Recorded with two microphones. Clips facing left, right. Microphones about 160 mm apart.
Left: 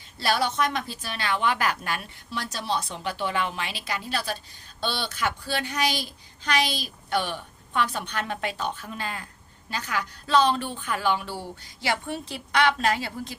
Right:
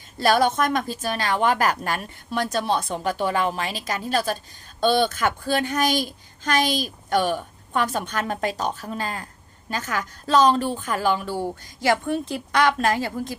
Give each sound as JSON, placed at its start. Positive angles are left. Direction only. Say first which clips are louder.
{"t": 0.2, "sound": "speech", "louder": "right 5 dB", "side_deg": -50}